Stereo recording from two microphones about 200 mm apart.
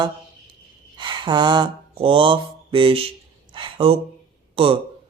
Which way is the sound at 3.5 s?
25° right (ahead or behind).